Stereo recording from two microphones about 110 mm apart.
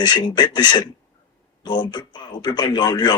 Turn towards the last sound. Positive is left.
turn(degrees=40)  # may be behind; listen again after turning